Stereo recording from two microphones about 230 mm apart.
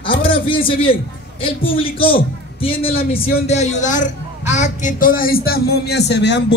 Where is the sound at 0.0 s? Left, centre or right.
Left.